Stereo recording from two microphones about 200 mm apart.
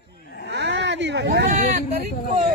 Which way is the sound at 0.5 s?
60° right (ahead or behind).